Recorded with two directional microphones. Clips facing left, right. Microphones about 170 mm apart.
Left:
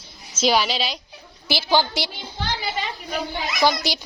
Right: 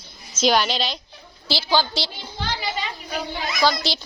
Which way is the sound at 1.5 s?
20° left (ahead or behind).